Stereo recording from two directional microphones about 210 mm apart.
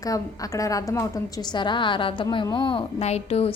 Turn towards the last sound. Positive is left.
turn(degrees=30)  # may be behind; listen again after turning